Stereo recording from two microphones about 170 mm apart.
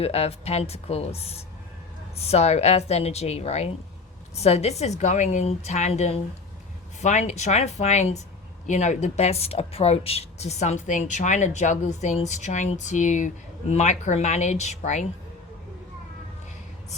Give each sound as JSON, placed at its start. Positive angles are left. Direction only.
{"t": 0.0, "sound": "a woman's voice", "side_deg": 35}